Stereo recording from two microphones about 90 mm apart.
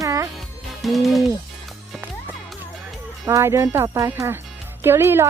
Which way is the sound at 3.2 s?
35° right (ahead or behind).